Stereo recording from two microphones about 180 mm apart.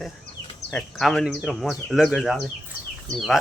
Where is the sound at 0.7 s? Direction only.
5° left (ahead or behind).